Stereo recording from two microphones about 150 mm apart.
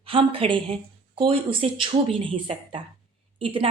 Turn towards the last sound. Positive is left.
turn(degrees=-35)  # may be behind; listen again after turning